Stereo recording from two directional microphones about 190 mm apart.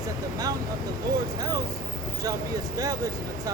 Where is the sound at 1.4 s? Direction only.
20° right (ahead or behind).